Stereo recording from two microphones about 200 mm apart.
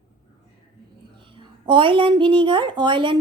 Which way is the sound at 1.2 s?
25° right (ahead or behind).